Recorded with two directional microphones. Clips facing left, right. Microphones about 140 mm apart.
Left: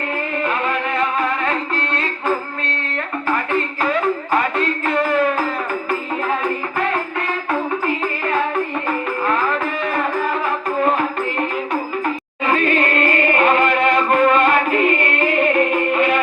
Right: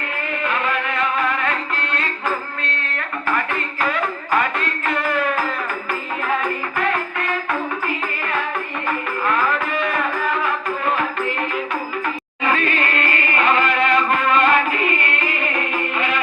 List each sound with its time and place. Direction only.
0.4 s music: 35° left (ahead or behind)
3.2 s a sound: 30° left (ahead or behind)
5.9 s music: 30° left (ahead or behind)
8.9 s music: 30° left (ahead or behind); by 16.2 s 50° left (ahead or behind)